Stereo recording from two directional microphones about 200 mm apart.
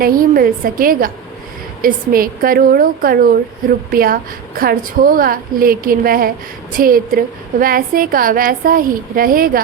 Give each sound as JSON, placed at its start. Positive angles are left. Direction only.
{"t": 0.0, "sound": "a woman's voice", "side_deg": -45}